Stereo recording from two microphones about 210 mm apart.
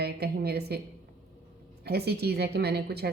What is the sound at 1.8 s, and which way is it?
A woman's voice, 50° right (ahead or behind).